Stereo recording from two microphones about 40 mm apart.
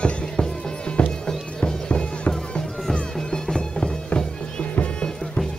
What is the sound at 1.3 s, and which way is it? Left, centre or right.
Bagpipes, centre.